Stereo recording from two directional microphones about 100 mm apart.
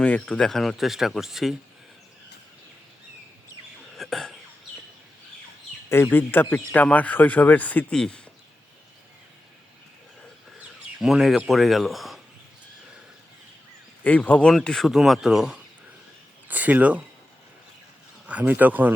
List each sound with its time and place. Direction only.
0.0 s speech: 10° left (ahead or behind)
3.9 s whispering: 5° left (ahead or behind)
5.9 s speech: 20° left (ahead or behind)
7.9 s speech: 5° left (ahead or behind)
10.6 s speech: centre (ahead or behind)
14.0 s speech: 15° left (ahead or behind); by 15.6 s 5° right (ahead or behind)
16.5 s speech: 15° right (ahead or behind)
18.3 s speech: 15° right (ahead or behind)